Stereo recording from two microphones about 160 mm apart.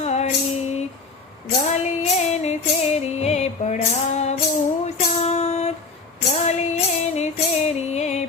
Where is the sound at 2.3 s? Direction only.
45° left (ahead or behind).